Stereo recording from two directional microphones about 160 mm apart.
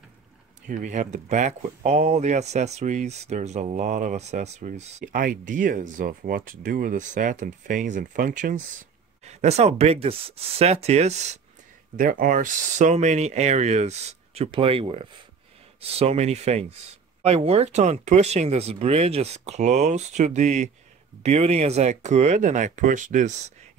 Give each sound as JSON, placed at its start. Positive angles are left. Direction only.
{"t": 0.7, "sound": "speech", "side_deg": -50}
{"t": 5.1, "sound": "speech", "side_deg": -60}
{"t": 9.2, "sound": "speech", "side_deg": -45}
{"t": 12.0, "sound": "speech", "side_deg": -60}